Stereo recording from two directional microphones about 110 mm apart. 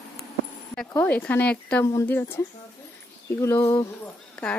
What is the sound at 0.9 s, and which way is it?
A woman's voice, 15° left (ahead or behind).